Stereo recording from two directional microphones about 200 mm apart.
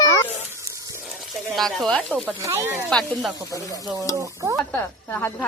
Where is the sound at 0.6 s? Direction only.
15° right (ahead or behind).